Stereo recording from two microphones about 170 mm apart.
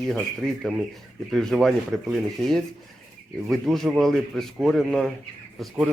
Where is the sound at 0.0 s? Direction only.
Centre (ahead or behind).